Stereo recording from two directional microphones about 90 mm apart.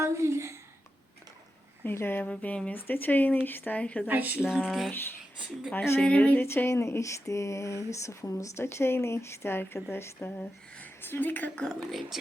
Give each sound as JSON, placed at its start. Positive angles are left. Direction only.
{"t": 0.0, "sound": "a woman's voice", "side_deg": -30}
{"t": 1.8, "sound": "speech", "side_deg": 25}
{"t": 4.0, "sound": "speech", "side_deg": -20}
{"t": 4.4, "sound": "a sound", "side_deg": 0}
{"t": 5.7, "sound": "speech", "side_deg": 30}
{"t": 6.0, "sound": "a sound", "side_deg": 15}
{"t": 7.9, "sound": "speech", "side_deg": 35}